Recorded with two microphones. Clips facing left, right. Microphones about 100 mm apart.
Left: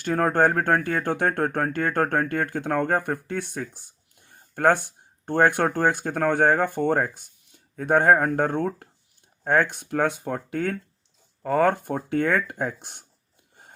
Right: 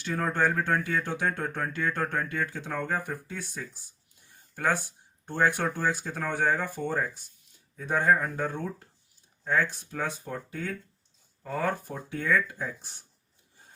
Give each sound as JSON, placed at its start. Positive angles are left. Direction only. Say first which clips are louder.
{"t": 0.0, "sound": "speech", "louder": "left 7 dB", "side_deg": 55}